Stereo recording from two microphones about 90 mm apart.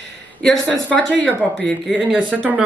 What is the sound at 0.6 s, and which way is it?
A woman's voice, 15° left (ahead or behind).